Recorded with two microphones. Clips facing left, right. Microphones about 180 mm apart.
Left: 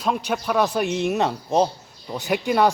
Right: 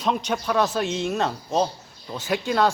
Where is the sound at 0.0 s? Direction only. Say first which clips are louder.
Left 1 dB; 5° left (ahead or behind).